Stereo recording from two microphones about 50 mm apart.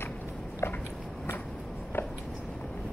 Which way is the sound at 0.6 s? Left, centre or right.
Left.